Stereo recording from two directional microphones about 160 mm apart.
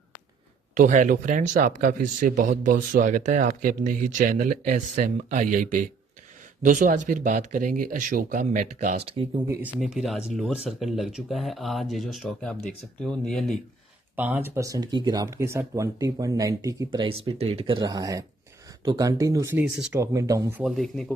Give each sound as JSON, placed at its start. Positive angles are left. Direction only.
{"t": 0.7, "sound": "a man's voice", "side_deg": -55}
{"t": 8.9, "sound": "speech", "side_deg": -35}
{"t": 9.5, "sound": "speech", "side_deg": -10}
{"t": 14.1, "sound": "speech", "side_deg": -10}
{"t": 20.6, "sound": "speech", "side_deg": 0}